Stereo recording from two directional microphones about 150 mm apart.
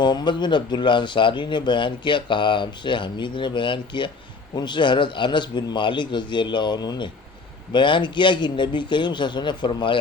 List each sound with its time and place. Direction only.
0.0 s speech: 30° left (ahead or behind)